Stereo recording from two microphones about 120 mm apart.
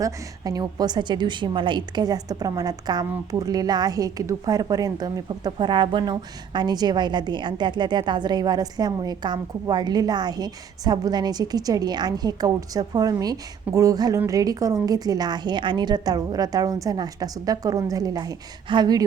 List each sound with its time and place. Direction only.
0.0 s a woman's voice: 30° right (ahead or behind)